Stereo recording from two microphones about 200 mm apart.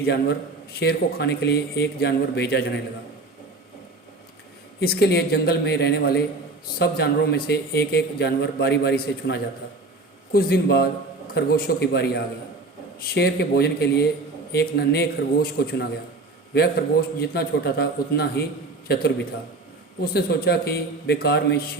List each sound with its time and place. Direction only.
0.0 s a man's voice: 55° left (ahead or behind)
4.8 s a man's voice: 50° left (ahead or behind)
17.2 s a man's voice: 50° left (ahead or behind)